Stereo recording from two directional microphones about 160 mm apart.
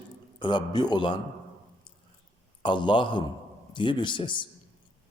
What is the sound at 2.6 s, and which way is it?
A man's voice, 30° left (ahead or behind).